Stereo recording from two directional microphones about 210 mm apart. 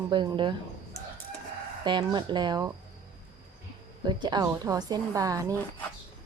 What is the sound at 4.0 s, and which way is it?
A woman's voice, 20° right (ahead or behind).